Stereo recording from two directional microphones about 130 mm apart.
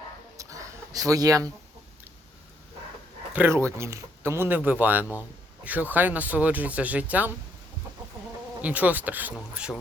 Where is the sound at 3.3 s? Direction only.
20° right (ahead or behind).